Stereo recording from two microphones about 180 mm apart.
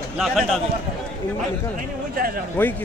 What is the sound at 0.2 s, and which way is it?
Speech, centre (ahead or behind).